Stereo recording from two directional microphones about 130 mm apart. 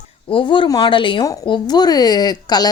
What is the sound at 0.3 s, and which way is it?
Speech, 40° left (ahead or behind).